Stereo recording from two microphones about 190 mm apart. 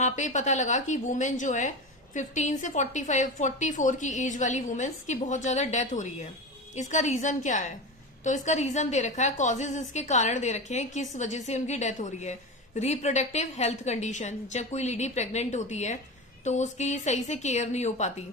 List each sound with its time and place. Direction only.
0.0 s a woman's voice: 40° left (ahead or behind)